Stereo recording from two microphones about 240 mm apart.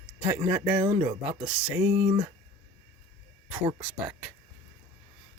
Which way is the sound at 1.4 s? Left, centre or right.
Centre.